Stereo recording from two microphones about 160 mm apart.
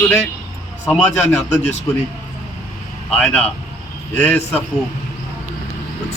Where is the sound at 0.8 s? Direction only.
10° left (ahead or behind).